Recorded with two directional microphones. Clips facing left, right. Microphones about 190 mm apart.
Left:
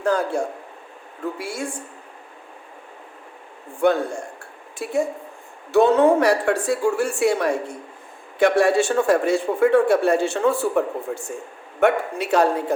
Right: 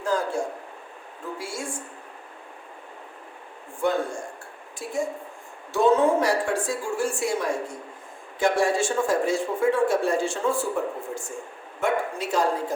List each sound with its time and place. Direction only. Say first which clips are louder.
0.1 s speech: left 3 dB; 60° left (ahead or behind)
1.4 s speech: left 4 dB; 60° left (ahead or behind)
3.8 s a woman's voice: left 5 dB; 65° left (ahead or behind)